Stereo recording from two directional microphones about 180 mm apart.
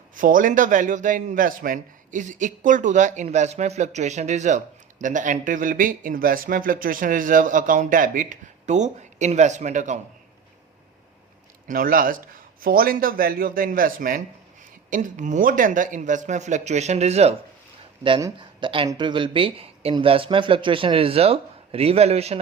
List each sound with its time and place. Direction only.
0.2 s a man's voice: 50° right (ahead or behind)
11.7 s a man's voice: 50° right (ahead or behind); by 22.4 s 35° right (ahead or behind)